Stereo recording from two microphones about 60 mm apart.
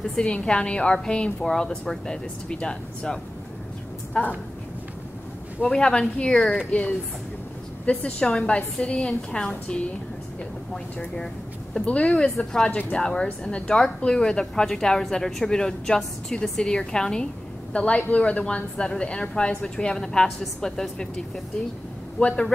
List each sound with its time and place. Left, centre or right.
0.0 s speech: centre
5.7 s speech: centre
7.9 s speech: centre
11.8 s speech: left
22.2 s speech: centre